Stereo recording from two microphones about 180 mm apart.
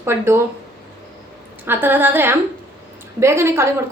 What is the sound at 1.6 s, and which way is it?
Speech, 10° right (ahead or behind).